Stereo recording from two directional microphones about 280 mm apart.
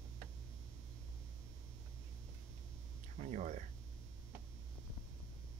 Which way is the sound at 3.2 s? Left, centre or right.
Right.